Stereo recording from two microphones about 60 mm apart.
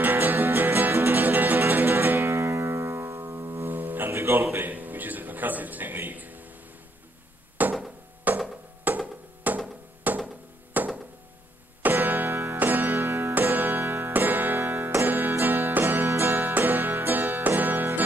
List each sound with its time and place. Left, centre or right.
0.0 s music: right
3.6 s music: right
4.1 s a sound: right
7.6 s a sound: right
10.1 s music: right
12.3 s music: right
12.5 s music: right
12.9 s music: right
13.3 s music: right
13.7 s music: right
14.1 s music: right
14.6 s music: right
15.0 s music: right
16.1 s music: right